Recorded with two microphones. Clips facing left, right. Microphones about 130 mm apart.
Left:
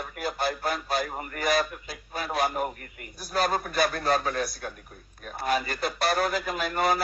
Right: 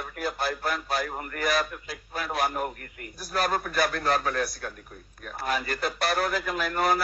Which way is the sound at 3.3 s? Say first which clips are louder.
Left 1 dB; 25° left (ahead or behind).